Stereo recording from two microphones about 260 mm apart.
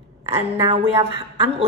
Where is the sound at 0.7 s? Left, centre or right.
Right.